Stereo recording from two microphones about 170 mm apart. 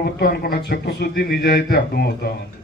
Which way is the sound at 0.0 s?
65° left (ahead or behind).